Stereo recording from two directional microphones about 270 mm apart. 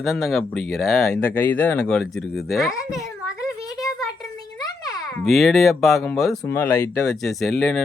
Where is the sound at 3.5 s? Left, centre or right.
Centre.